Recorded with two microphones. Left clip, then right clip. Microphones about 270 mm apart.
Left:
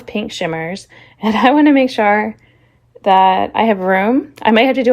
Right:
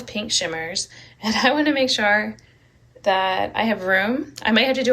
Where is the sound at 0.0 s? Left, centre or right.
Centre.